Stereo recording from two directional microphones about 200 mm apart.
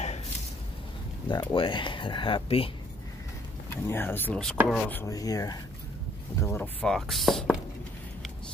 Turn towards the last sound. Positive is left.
turn(degrees=0)  # may be behind; listen again after turning